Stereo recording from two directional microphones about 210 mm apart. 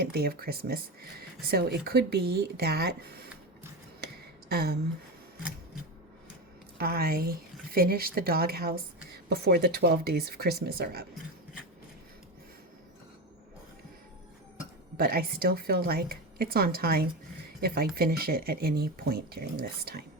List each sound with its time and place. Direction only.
0.0 s speech: 50° right (ahead or behind)
4.0 s a sound: 50° right (ahead or behind)
6.7 s speech: 45° right (ahead or behind)
14.9 s speech: 45° right (ahead or behind)